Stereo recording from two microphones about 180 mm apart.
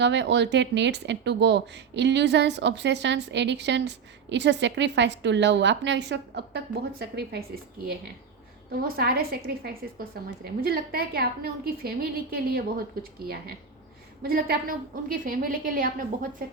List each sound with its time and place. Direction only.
0.0 s speech: 75° right (ahead or behind)
8.7 s a woman's voice: 55° right (ahead or behind)